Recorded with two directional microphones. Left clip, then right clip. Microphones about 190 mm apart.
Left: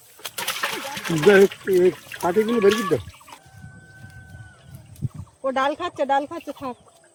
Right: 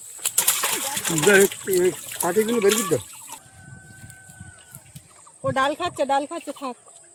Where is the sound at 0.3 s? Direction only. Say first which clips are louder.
Right 1 dB; 40° right (ahead or behind).